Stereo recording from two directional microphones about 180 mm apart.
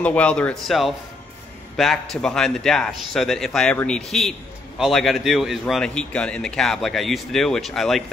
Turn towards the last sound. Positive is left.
turn(degrees=0)  # may be behind; listen again after turning